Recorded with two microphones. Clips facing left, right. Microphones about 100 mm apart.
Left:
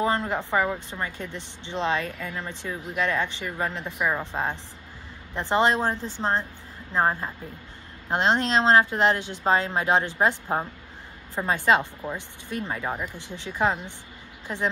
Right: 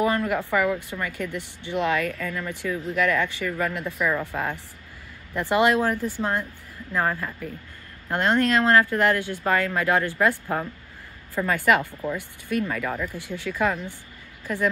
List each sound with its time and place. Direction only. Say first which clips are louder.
0.0 s speech: right 2 dB; 25° left (ahead or behind)